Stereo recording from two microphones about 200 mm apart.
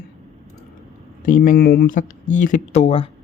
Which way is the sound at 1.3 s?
40° left (ahead or behind).